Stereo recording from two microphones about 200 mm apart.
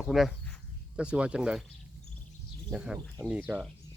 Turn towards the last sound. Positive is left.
turn(degrees=-5)  # may be behind; listen again after turning